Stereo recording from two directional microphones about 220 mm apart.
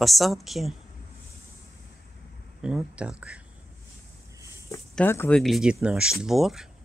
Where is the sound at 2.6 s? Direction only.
5° right (ahead or behind).